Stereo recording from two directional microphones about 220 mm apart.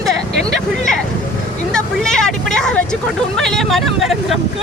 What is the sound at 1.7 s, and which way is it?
Speech, 5° left (ahead or behind).